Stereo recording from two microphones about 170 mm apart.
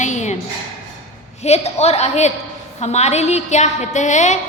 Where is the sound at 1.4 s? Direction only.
40° left (ahead or behind).